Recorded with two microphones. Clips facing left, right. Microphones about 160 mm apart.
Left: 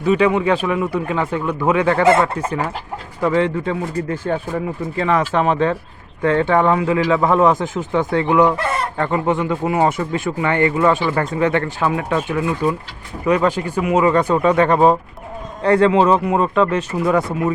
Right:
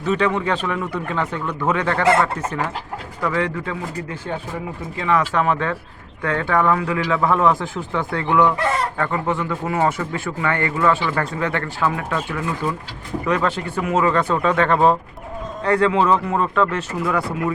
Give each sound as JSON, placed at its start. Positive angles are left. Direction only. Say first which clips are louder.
{"t": 0.0, "sound": "speech", "louder": "left 5 dB", "side_deg": 10}
{"t": 3.2, "sound": "speech", "louder": "left 5 dB", "side_deg": 25}
{"t": 4.3, "sound": "speech", "louder": "left 6 dB", "side_deg": 50}
{"t": 15.6, "sound": "speech", "louder": "left 4 dB", "side_deg": 25}